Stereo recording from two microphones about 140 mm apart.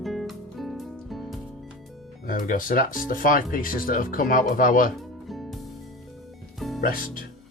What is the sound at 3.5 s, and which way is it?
Speech, 90° left.